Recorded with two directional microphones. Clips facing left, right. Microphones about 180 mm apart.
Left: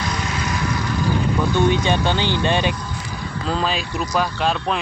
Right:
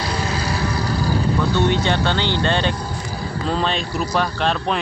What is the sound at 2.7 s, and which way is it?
Vehicle, 35° right (ahead or behind).